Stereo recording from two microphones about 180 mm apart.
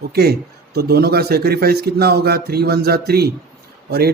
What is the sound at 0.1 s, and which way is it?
A man's voice, 60° right (ahead or behind).